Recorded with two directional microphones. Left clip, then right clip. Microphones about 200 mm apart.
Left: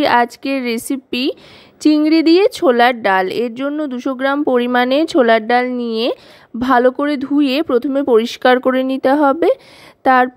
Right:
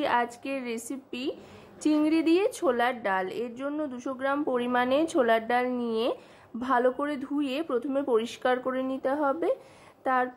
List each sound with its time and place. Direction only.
0.0 s speech: 45° left (ahead or behind)